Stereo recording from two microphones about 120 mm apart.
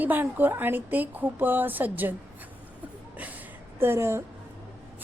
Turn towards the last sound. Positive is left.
turn(degrees=-20)  # may be behind; listen again after turning